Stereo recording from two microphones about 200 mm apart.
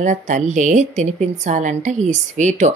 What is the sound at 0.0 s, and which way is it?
Speech, 40° right (ahead or behind).